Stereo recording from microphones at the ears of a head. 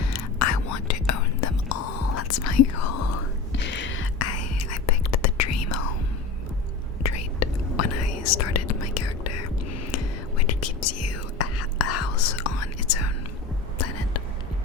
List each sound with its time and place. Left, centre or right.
0.1 s whispering: left
7.0 s whispering: left